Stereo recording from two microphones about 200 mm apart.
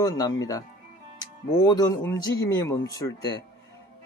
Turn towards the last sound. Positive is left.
turn(degrees=20)  # may be behind; listen again after turning